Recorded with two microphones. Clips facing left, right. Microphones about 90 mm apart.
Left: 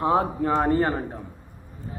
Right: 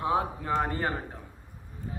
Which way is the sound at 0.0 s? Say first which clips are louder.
Left 6 dB; 40° left (ahead or behind).